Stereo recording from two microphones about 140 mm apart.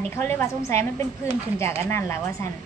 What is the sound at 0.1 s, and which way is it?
A woman's voice, 15° left (ahead or behind).